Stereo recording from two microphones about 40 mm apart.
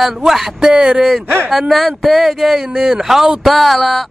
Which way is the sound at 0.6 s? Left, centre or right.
Centre.